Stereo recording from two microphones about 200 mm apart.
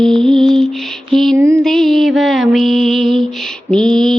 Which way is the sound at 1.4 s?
15° right (ahead or behind).